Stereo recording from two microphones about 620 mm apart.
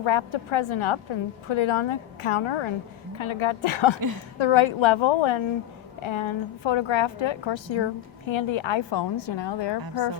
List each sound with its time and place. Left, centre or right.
0.0 s a woman's voice: left